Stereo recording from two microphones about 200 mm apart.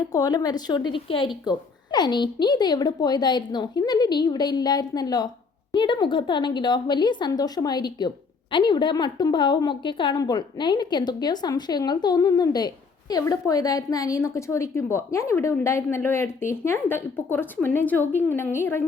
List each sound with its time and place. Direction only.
0.1 s a woman's voice: 20° left (ahead or behind)